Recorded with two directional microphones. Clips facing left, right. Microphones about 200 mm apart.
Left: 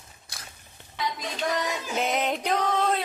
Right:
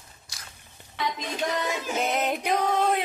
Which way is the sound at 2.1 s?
5° right (ahead or behind).